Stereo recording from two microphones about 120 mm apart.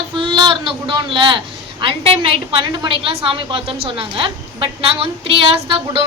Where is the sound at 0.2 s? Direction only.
40° right (ahead or behind).